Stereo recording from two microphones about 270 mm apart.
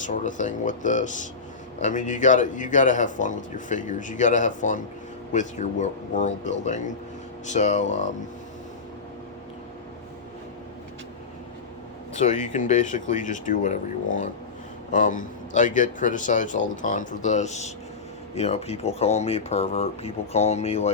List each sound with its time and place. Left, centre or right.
0.0 s speech: left
12.1 s speech: left